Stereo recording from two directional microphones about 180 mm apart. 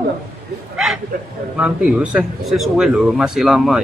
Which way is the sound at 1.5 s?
5° right (ahead or behind).